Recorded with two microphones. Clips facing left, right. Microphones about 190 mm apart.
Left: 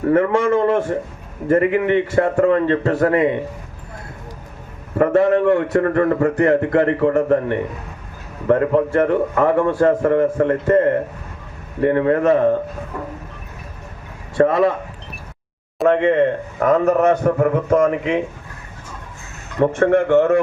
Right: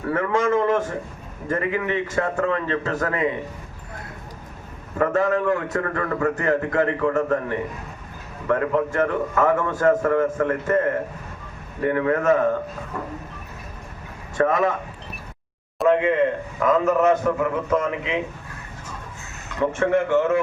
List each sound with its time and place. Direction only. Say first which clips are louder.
0.0 s a man's voice: left 6 dB; 30° left (ahead or behind)
4.9 s a man's voice: left 6 dB; 35° left (ahead or behind)
14.3 s a man's voice: left 5 dB; 30° left (ahead or behind)
15.8 s speech: left 3 dB; centre (ahead or behind)
16.6 s a man's voice: left 4 dB; 50° left (ahead or behind)
19.8 s a man's voice: left 5 dB; 55° left (ahead or behind)